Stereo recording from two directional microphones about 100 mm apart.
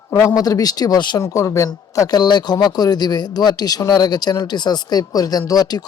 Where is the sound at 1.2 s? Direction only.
30° left (ahead or behind).